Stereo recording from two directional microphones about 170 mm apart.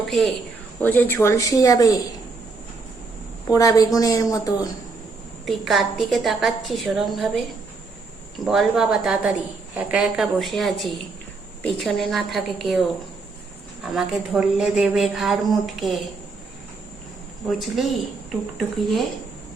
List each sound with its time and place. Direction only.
0.1 s speech: centre (ahead or behind)
0.8 s a woman's voice: 10° left (ahead or behind)
3.4 s a woman's voice: 20° left (ahead or behind)
5.5 s speech: centre (ahead or behind)
8.4 s speech: centre (ahead or behind)
17.5 s speech: centre (ahead or behind)